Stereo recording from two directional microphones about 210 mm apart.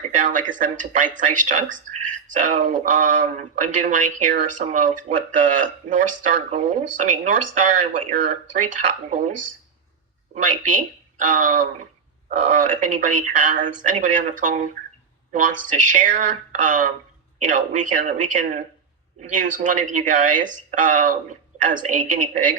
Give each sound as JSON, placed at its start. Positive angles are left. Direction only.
{"t": 0.2, "sound": "speech", "side_deg": -40}
{"t": 10.7, "sound": "speech", "side_deg": -40}